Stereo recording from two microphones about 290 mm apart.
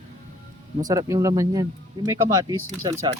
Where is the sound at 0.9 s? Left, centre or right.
Centre.